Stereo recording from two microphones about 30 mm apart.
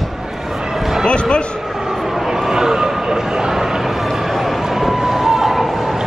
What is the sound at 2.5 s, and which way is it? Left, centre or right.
Vehicle, centre.